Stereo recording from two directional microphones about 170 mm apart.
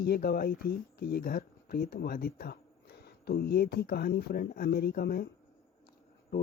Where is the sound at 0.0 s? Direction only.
65° left (ahead or behind).